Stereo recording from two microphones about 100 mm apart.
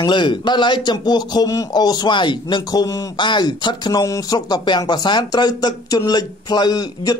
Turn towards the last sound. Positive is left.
turn(degrees=40)  # may be behind; listen again after turning